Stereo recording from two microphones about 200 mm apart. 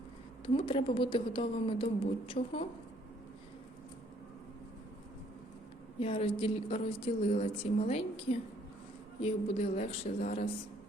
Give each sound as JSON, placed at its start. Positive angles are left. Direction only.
{"t": 0.4, "sound": "a woman's voice", "side_deg": 25}
{"t": 6.0, "sound": "a woman's voice", "side_deg": 30}